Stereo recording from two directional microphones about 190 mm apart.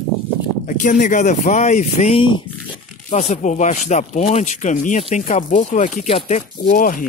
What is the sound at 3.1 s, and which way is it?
Speech, 35° left (ahead or behind).